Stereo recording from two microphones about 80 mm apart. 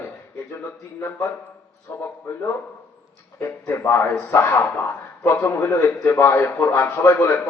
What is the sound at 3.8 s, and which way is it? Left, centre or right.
A man's voice, left.